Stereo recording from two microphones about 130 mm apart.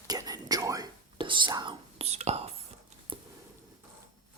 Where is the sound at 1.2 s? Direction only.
40° right (ahead or behind).